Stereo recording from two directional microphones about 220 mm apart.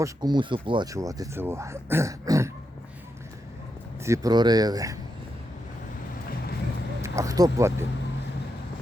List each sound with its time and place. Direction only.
0.0 s speech: 20° right (ahead or behind)
4.0 s speech: 15° right (ahead or behind)
7.0 s speech: 15° right (ahead or behind)